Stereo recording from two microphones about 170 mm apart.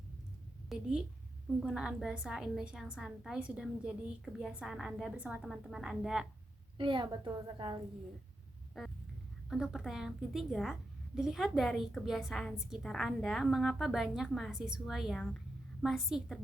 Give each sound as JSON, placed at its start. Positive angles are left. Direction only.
{"t": 0.7, "sound": "a woman's voice", "side_deg": -5}
{"t": 6.7, "sound": "a woman's voice", "side_deg": -30}
{"t": 8.8, "sound": "a woman's voice", "side_deg": 0}